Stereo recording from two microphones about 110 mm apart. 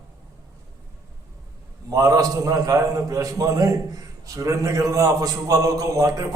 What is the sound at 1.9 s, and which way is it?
A man's voice, 30° right (ahead or behind).